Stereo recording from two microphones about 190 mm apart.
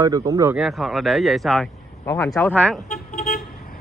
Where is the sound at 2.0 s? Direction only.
15° left (ahead or behind).